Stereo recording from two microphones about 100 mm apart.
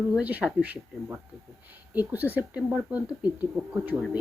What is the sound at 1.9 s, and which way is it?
Speech, 15° right (ahead or behind).